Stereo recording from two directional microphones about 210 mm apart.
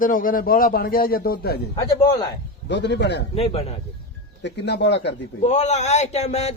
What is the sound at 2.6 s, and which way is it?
Speech, 55° left (ahead or behind).